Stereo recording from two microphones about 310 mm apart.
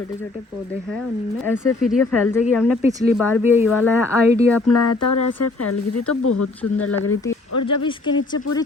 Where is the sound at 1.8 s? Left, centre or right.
Centre.